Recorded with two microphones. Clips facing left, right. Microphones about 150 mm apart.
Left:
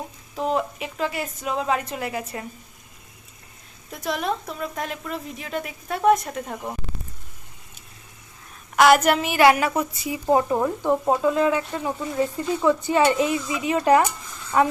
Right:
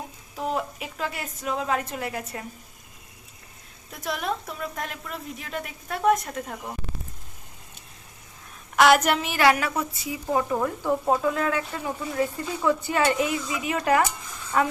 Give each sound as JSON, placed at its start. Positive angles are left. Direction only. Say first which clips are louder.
{"t": 0.5, "sound": "a woman's voice", "louder": "left 4 dB", "side_deg": 0}
{"t": 4.0, "sound": "a woman's voice", "louder": "left 3 dB", "side_deg": 0}
{"t": 8.7, "sound": "a woman's voice", "louder": "left 2 dB", "side_deg": 0}
{"t": 9.3, "sound": "a woman's voice", "louder": "left 4 dB", "side_deg": 15}